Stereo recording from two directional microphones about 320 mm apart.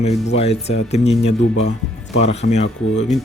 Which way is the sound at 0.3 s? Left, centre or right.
Centre.